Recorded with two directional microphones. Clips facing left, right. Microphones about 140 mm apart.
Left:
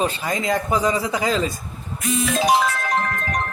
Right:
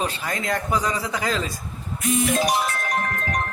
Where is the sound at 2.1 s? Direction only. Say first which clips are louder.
Left 3 dB; 90° left.